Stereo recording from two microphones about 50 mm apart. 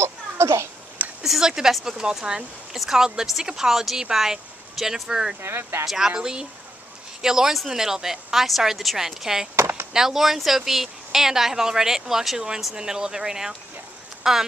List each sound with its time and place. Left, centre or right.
0.0 s a sound: right
1.2 s a sound: centre
1.9 s speech: centre
2.7 s speech: centre
5.4 s speech: right
5.9 s speech: centre